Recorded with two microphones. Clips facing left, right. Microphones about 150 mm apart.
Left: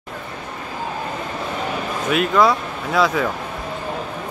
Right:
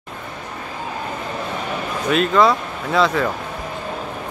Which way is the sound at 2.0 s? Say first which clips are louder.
Right 1 dB; 5° left (ahead or behind).